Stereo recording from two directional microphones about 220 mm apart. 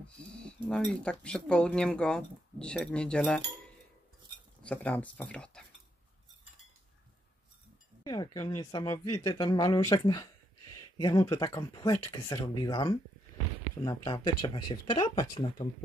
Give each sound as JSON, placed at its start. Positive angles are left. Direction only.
{"t": 0.4, "sound": "speech", "side_deg": 5}
{"t": 4.6, "sound": "speech", "side_deg": 5}
{"t": 8.0, "sound": "speech", "side_deg": 20}
{"t": 14.0, "sound": "speech", "side_deg": 20}